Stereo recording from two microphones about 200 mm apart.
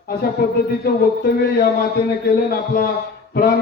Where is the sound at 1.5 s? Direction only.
50° left (ahead or behind).